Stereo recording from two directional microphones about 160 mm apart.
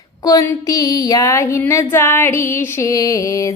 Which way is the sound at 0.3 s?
20° left (ahead or behind).